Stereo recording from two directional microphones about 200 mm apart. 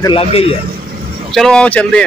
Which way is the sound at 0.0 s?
25° left (ahead or behind).